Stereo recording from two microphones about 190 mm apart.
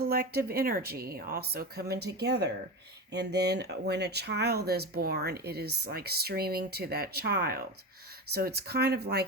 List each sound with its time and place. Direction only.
0.0 s speech: 55° right (ahead or behind)